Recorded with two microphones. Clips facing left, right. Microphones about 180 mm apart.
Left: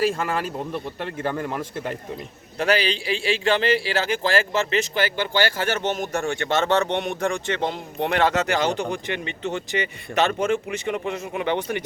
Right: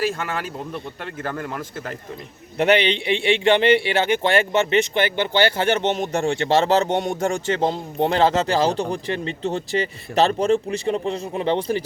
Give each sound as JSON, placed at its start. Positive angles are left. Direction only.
{"t": 0.0, "sound": "speech", "side_deg": 30}
{"t": 1.3, "sound": "speech", "side_deg": 5}
{"t": 2.6, "sound": "a man's voice", "side_deg": -25}